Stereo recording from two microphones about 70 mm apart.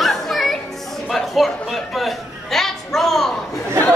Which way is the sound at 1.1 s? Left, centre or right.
Centre.